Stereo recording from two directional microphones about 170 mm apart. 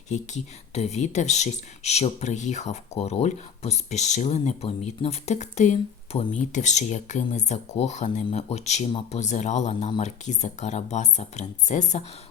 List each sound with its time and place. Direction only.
0.1 s speech: 45° left (ahead or behind)